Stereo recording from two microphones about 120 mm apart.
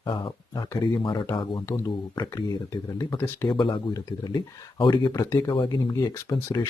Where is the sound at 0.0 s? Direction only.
40° left (ahead or behind).